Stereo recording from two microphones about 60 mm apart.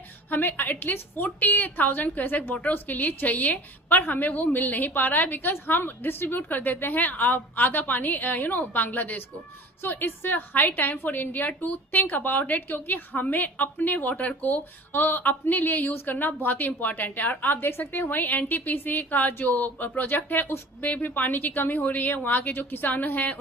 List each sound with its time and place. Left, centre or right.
0.3 s a woman's voice: left